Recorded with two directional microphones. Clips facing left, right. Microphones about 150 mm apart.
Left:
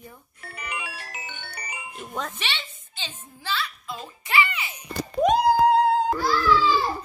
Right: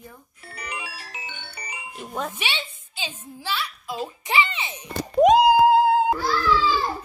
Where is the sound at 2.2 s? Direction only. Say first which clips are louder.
Right 3 dB; 10° right (ahead or behind).